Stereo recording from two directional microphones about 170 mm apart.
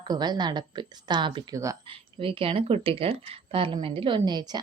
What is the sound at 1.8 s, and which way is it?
Speech, 30° right (ahead or behind).